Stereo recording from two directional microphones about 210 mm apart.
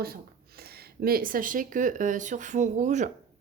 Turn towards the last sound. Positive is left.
turn(degrees=-35)  # may be behind; listen again after turning